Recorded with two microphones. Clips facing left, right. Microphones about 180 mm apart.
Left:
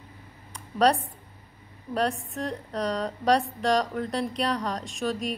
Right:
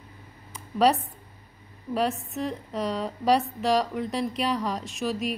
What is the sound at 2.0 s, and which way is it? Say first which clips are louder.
A woman's voice: even; 5° right (ahead or behind).